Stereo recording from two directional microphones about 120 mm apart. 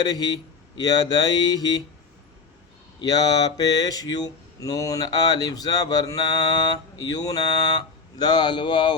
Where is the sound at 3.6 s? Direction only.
30° left (ahead or behind).